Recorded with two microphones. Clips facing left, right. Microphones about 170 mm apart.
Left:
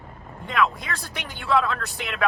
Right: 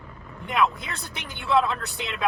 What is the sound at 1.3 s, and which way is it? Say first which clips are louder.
Speech: even; 20° right (ahead or behind).